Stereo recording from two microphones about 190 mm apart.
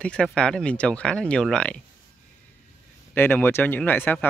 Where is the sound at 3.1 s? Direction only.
10° left (ahead or behind).